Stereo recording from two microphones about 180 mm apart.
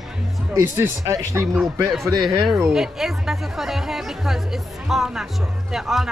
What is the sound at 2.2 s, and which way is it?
Speech, centre (ahead or behind).